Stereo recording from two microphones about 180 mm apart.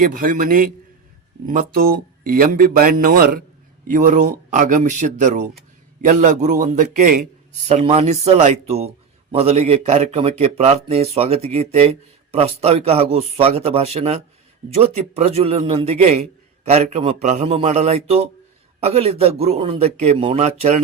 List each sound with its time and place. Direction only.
0.0 s a man's voice: 50° right (ahead or behind)